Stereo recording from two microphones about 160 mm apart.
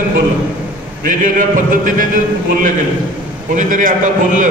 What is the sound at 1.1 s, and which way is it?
A man's voice, 55° right (ahead or behind).